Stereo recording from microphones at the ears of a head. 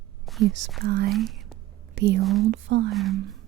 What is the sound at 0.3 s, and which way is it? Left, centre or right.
Speech, right.